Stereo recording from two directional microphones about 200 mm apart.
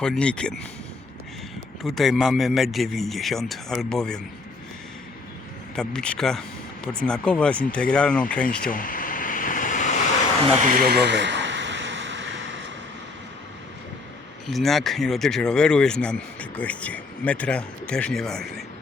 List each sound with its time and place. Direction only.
0.0 s speech: 5° left (ahead or behind)
1.8 s speech: centre (ahead or behind)
5.7 s speech: 5° left (ahead or behind)
8.7 s a sound: 45° left (ahead or behind)
10.8 s a sound: 55° right (ahead or behind)
14.4 s speech: centre (ahead or behind)